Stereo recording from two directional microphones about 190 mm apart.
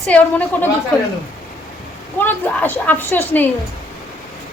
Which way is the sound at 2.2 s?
10° left (ahead or behind).